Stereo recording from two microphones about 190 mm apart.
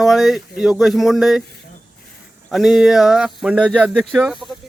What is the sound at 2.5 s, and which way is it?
Speech, centre (ahead or behind).